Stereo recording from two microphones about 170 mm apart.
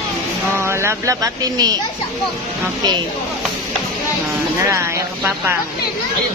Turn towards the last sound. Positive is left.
turn(degrees=-15)  # may be behind; listen again after turning